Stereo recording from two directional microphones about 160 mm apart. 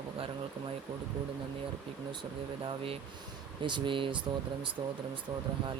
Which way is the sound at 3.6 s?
30° right (ahead or behind).